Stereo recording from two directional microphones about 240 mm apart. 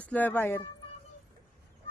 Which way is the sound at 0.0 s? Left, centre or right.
Centre.